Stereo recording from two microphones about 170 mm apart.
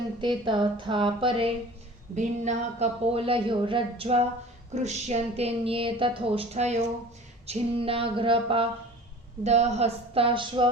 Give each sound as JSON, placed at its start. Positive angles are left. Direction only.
{"t": 0.2, "sound": "speech", "side_deg": -30}
{"t": 2.1, "sound": "a woman's voice", "side_deg": -45}